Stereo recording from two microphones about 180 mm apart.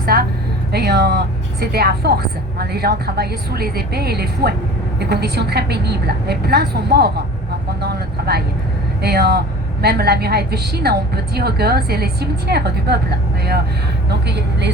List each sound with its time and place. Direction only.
0.0 s a sound: 60° right (ahead or behind)
1.7 s a woman's voice: 60° right (ahead or behind)
7.8 s vehicle: 60° right (ahead or behind)
9.0 s a woman's voice: 60° right (ahead or behind)